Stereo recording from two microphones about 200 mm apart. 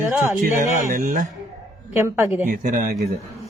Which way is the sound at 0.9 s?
40° right (ahead or behind).